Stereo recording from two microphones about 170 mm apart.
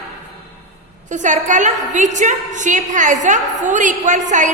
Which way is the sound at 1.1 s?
45° right (ahead or behind).